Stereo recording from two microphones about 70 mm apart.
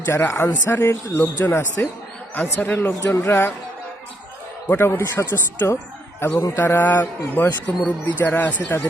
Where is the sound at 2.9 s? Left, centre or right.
Left.